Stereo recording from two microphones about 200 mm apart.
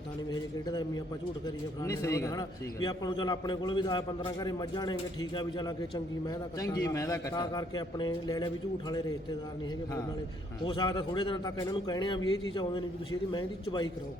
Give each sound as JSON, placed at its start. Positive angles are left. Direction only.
{"t": 1.8, "sound": "a man's voice", "side_deg": 15}
{"t": 10.7, "sound": "a man's voice", "side_deg": 25}